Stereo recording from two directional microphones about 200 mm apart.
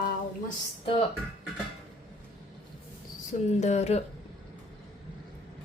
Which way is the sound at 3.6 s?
35° left (ahead or behind).